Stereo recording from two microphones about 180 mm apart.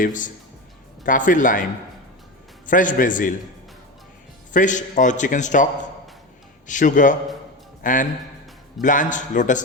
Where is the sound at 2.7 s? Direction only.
45° left (ahead or behind).